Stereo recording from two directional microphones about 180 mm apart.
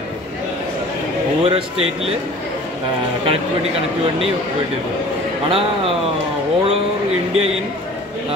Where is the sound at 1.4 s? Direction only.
35° right (ahead or behind).